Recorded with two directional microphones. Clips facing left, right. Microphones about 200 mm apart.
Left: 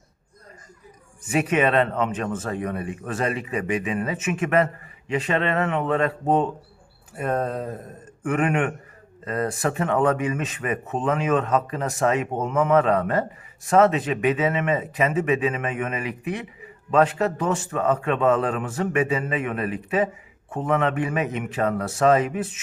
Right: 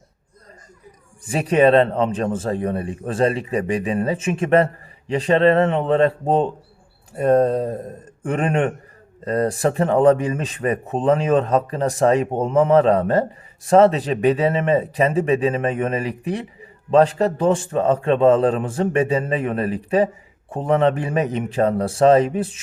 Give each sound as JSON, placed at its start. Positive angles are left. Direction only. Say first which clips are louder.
{"t": 1.2, "sound": "speech", "louder": "right 5 dB", "side_deg": -30}